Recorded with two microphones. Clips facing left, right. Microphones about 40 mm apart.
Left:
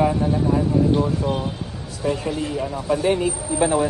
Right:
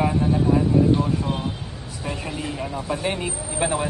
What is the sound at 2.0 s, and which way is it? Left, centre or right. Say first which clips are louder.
Speech: left 6 dB; centre.